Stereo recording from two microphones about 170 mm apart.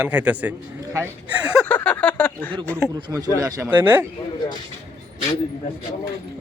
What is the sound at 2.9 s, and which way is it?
A man's voice, 20° right (ahead or behind).